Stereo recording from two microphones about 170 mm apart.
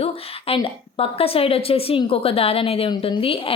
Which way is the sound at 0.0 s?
35° left (ahead or behind).